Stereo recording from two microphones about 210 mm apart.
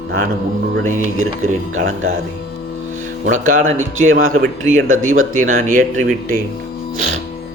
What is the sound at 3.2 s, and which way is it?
Speech, 40° right (ahead or behind).